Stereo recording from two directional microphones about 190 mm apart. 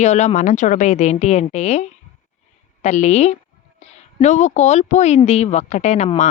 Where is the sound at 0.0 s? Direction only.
35° left (ahead or behind).